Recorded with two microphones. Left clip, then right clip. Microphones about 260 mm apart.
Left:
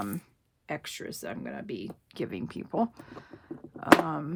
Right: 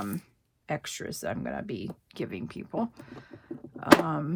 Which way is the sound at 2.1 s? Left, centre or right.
Centre.